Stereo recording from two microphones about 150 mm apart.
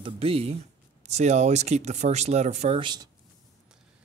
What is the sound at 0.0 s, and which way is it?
Speech, 40° right (ahead or behind).